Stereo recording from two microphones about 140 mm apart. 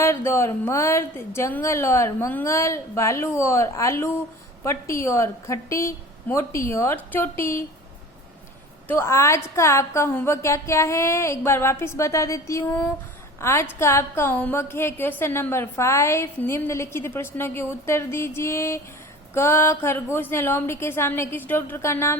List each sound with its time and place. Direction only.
0.0 s speech: 20° left (ahead or behind)
8.9 s a woman's voice: 20° left (ahead or behind)